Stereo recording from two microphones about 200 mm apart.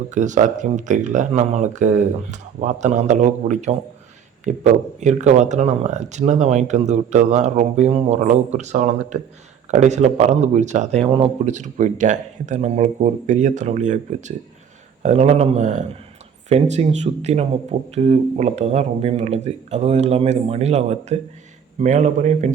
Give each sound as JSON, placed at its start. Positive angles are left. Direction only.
{"t": 0.1, "sound": "speech", "side_deg": -35}